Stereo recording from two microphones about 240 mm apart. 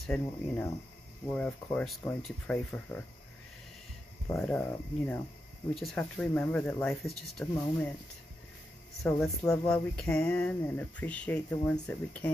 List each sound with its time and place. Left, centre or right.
0.0 s speech: centre
4.3 s speech: centre
9.0 s speech: centre